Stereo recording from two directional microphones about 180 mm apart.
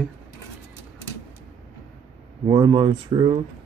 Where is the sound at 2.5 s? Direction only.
25° right (ahead or behind).